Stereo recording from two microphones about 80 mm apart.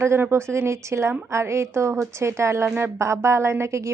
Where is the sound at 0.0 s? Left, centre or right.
Right.